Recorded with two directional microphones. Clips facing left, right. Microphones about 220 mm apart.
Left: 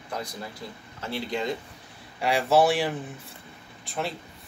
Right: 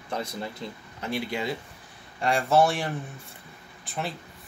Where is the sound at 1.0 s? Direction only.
15° right (ahead or behind).